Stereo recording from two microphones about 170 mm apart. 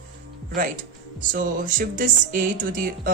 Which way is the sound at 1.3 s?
50° right (ahead or behind).